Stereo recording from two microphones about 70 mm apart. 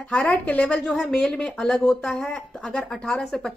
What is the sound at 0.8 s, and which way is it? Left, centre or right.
Speech, centre.